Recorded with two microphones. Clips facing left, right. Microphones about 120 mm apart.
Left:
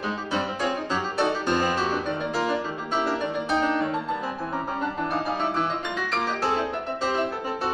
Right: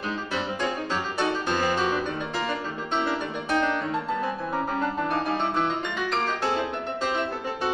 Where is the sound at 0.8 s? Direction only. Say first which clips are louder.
Left 2 dB; 5° left (ahead or behind).